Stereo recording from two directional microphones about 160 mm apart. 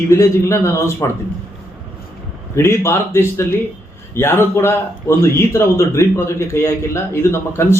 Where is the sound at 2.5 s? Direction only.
15° left (ahead or behind).